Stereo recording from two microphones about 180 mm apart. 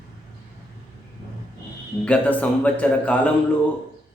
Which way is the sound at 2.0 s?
5° left (ahead or behind).